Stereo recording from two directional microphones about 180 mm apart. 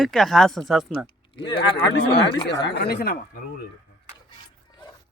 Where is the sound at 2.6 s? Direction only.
65° left (ahead or behind).